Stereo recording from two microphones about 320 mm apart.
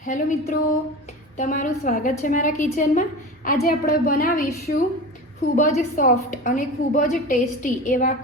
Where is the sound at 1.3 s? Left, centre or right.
Left.